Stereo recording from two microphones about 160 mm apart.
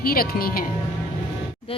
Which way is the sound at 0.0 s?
65° left (ahead or behind).